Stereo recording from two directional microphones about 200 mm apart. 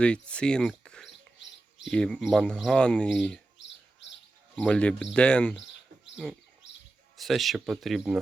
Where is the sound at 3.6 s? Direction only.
65° left (ahead or behind).